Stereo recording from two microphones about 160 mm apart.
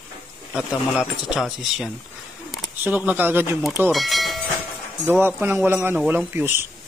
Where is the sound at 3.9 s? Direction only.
Centre (ahead or behind).